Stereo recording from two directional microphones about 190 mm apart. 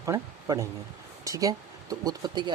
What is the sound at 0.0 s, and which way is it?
Speech, 15° right (ahead or behind).